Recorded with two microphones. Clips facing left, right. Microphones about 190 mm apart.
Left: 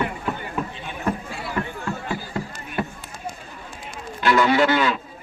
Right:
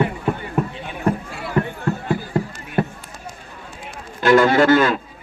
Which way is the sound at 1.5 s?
55° right (ahead or behind).